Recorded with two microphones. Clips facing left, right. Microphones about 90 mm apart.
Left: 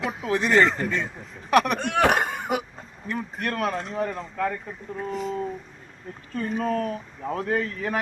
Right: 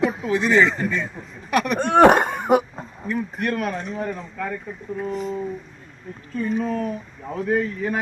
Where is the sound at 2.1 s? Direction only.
50° right (ahead or behind).